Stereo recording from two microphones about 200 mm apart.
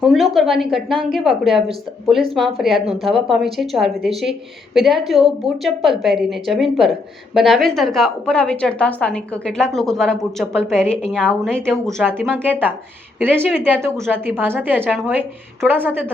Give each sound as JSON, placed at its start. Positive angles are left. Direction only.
{"t": 0.0, "sound": "a woman's voice", "side_deg": 0}
{"t": 12.3, "sound": "a woman's voice", "side_deg": -10}